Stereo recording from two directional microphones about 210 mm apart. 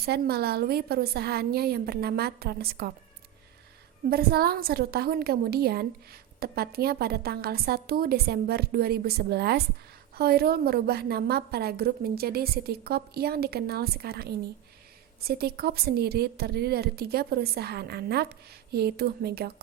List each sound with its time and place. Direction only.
0.0 s a woman's voice: 50° right (ahead or behind)
4.1 s a woman's voice: 45° right (ahead or behind)